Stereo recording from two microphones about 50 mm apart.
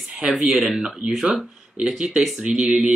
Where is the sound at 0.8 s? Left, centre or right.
Right.